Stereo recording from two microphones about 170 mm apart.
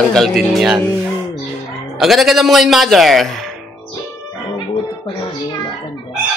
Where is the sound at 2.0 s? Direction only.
Centre (ahead or behind).